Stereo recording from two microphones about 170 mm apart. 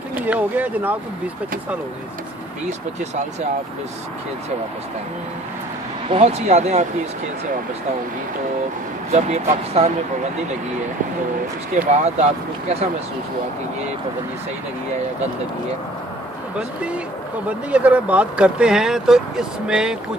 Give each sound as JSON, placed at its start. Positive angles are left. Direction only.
{"t": 0.1, "sound": "speech", "side_deg": -10}
{"t": 6.0, "sound": "speech", "side_deg": -40}
{"t": 9.1, "sound": "speech", "side_deg": -40}
{"t": 11.9, "sound": "speech", "side_deg": -40}
{"t": 16.5, "sound": "speech", "side_deg": -5}